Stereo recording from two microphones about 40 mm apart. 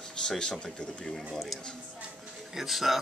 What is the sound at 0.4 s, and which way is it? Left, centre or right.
Speech, centre.